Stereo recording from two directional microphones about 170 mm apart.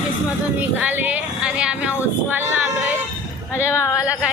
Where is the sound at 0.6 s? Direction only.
10° right (ahead or behind).